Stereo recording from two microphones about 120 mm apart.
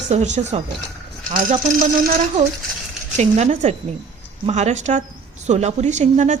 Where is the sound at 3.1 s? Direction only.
70° right (ahead or behind).